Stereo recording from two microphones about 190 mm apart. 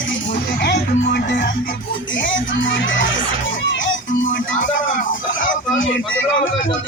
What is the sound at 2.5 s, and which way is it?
Music, 80° left.